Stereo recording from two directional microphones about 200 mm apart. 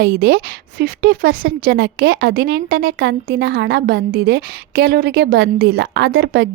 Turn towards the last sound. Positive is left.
turn(degrees=-55)  # may be behind; listen again after turning